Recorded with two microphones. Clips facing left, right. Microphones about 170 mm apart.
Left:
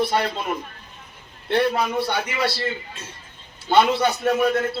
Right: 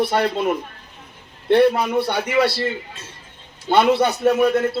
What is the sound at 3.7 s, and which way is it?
Speech, 60° right (ahead or behind).